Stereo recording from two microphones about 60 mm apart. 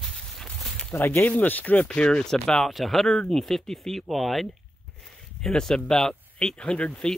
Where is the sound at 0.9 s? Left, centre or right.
Left.